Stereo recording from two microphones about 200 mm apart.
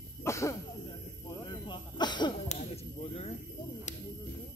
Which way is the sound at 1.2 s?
20° left (ahead or behind).